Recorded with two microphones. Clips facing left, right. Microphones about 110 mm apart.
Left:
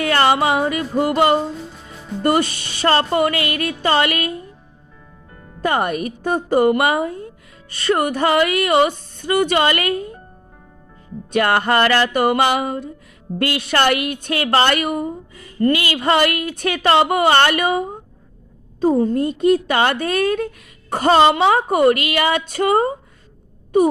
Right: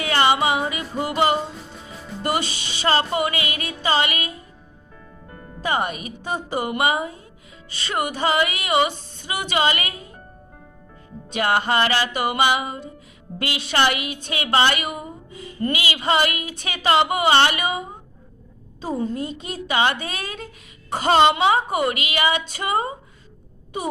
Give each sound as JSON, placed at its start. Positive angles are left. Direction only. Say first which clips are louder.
{"t": 0.0, "sound": "music", "louder": "left 3 dB", "side_deg": 50}
{"t": 2.2, "sound": "a woman's voice", "louder": "left 7 dB", "side_deg": 50}
{"t": 5.6, "sound": "a woman's voice", "louder": "left 5 dB", "side_deg": 50}
{"t": 11.3, "sound": "a woman's voice", "louder": "left 4 dB", "side_deg": 50}